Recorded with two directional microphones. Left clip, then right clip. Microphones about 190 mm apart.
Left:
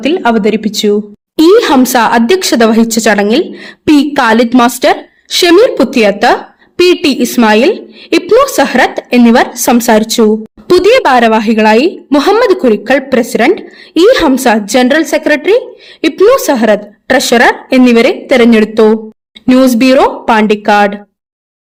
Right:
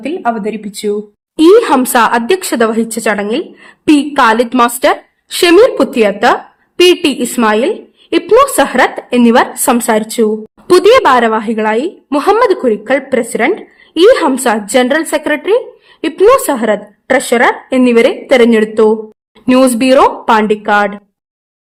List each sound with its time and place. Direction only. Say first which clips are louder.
0.0 s speech: left 6 dB; 45° left (ahead or behind)
1.4 s a woman's voice: left 1 dB; 20° left (ahead or behind)
10.7 s a woman's voice: even; 10° left (ahead or behind)